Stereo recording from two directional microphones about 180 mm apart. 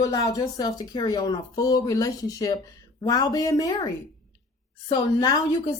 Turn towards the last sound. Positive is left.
turn(degrees=20)  # may be behind; listen again after turning